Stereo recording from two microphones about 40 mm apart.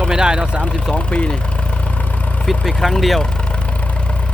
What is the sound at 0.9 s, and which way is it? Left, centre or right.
Speech, left.